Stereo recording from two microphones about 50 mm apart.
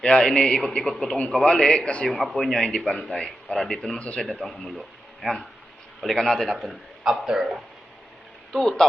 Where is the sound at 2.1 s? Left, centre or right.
Centre.